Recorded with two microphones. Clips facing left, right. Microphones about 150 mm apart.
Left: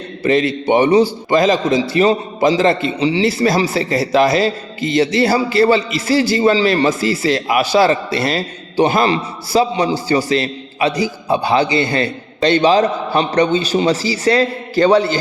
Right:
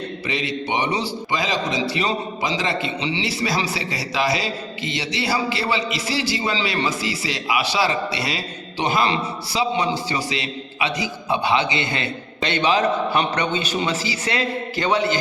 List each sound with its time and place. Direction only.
0.2 s a man's voice: 45° left (ahead or behind)